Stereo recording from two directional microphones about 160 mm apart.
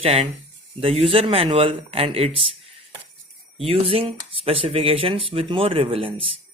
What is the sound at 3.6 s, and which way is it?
Speech, 35° right (ahead or behind).